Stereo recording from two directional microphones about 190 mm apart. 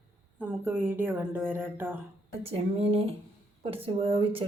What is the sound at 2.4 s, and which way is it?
A woman's voice, 30° right (ahead or behind).